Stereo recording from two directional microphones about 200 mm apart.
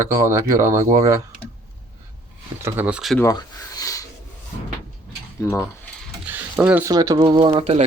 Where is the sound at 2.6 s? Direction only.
10° right (ahead or behind).